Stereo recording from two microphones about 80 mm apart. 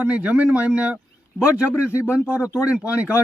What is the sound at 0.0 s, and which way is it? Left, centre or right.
Speech, centre.